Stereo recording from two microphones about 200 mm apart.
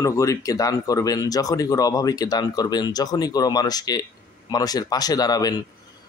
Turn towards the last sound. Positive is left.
turn(degrees=20)  # may be behind; listen again after turning